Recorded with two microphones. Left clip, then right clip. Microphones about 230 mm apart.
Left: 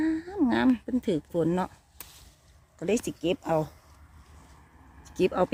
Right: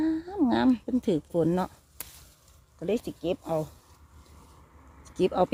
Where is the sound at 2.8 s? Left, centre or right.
Centre.